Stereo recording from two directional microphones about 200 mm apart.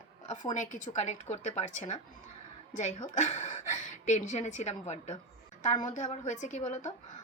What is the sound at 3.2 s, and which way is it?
A woman's voice, 40° left (ahead or behind).